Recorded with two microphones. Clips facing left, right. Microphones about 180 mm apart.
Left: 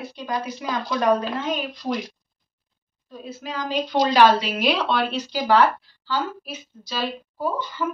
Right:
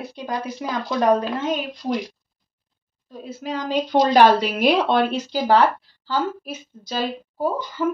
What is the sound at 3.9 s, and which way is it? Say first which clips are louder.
Speech: right 2 dB; 50° right (ahead or behind).